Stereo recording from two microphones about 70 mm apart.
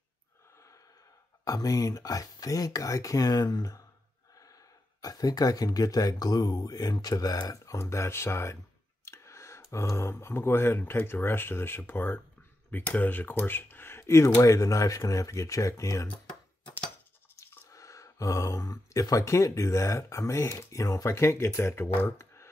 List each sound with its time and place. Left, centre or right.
1.4 s speech: left
5.0 s speech: left
17.7 s speech: left